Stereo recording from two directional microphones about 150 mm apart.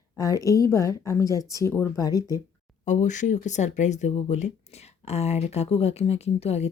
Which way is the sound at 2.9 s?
55° left (ahead or behind).